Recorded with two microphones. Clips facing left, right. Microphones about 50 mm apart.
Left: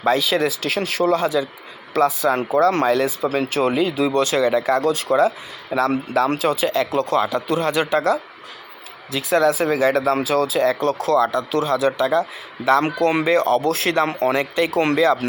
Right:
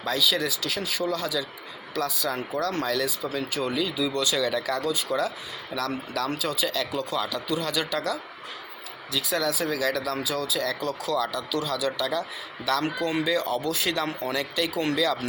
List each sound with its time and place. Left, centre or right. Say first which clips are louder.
0.0 s speech: left 7 dB; left
1.2 s speech: left 9 dB; left
3.8 s speech: left 8 dB; left
4.4 s speech: left 9 dB; left
6.3 s speech: left 9 dB; left
10.2 s speech: left 10 dB; left
13.0 s speech: left 8 dB; left
14.9 s speech: left 9 dB; left